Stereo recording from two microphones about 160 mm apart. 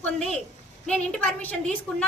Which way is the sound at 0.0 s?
5° left (ahead or behind).